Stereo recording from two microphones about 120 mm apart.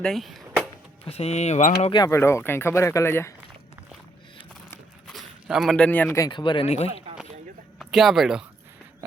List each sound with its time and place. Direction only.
0.0 s a sound: centre (ahead or behind)
1.0 s speech: 60° left (ahead or behind)
2.0 s speech: 20° left (ahead or behind)
5.0 s walk: centre (ahead or behind)
5.7 s speech: 10° left (ahead or behind)
6.1 s speech: 35° left (ahead or behind)
6.7 s speech: 60° left (ahead or behind)
7.8 s speech: centre (ahead or behind)